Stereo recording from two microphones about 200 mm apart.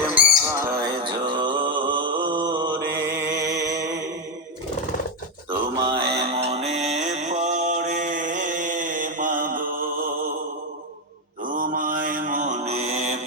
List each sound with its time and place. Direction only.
0.2 s music: 15° right (ahead or behind)
5.5 s mantra: 20° right (ahead or behind); by 9.7 s 45° right (ahead or behind)
11.5 s mantra: 40° right (ahead or behind)